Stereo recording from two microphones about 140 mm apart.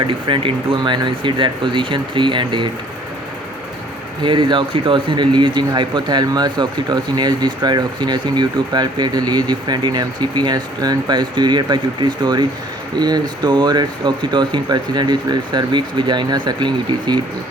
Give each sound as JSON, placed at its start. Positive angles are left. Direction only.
{"t": 0.1, "sound": "a man's voice", "side_deg": -40}
{"t": 4.2, "sound": "a man's voice", "side_deg": -35}